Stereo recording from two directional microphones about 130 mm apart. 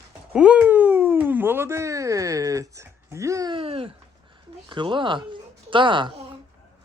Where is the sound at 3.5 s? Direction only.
45° right (ahead or behind).